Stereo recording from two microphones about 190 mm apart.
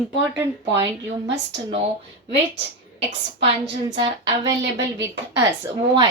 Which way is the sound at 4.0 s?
20° right (ahead or behind).